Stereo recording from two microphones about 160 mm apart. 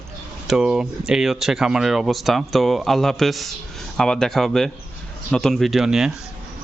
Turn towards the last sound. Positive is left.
turn(degrees=-5)  # may be behind; listen again after turning